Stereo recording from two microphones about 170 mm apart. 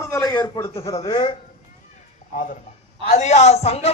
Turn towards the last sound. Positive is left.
turn(degrees=40)  # may be behind; listen again after turning